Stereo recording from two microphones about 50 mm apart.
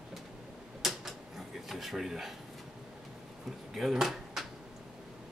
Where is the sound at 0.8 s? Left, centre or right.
Centre.